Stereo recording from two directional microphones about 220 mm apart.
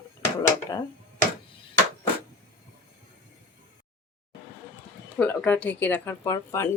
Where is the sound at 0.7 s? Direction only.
15° left (ahead or behind).